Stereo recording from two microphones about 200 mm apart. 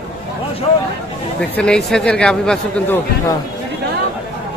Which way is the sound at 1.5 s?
5° left (ahead or behind).